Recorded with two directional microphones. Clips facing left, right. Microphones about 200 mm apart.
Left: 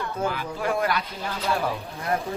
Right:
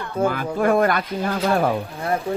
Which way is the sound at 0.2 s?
50° right (ahead or behind).